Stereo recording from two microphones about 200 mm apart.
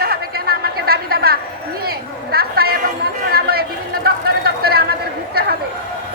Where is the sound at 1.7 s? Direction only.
50° right (ahead or behind).